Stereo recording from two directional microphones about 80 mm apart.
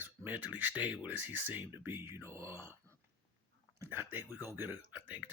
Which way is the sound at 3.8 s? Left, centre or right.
Right.